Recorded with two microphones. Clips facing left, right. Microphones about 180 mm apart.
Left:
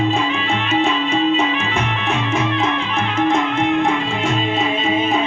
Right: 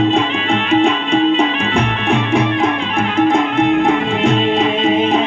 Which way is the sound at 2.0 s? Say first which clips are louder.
Right 5 dB; 15° right (ahead or behind).